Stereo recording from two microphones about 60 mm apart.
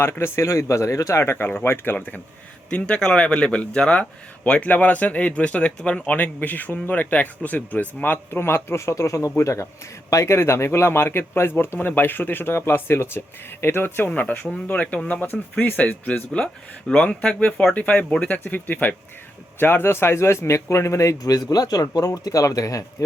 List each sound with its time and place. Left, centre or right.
0.0 s speech: left
2.0 s speech: left
2.6 s a man's voice: centre; by 23.0 s left